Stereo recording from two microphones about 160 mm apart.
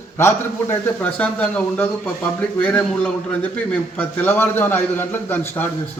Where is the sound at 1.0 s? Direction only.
10° left (ahead or behind).